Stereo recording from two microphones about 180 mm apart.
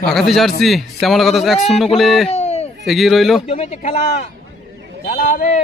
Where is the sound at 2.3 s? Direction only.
35° left (ahead or behind).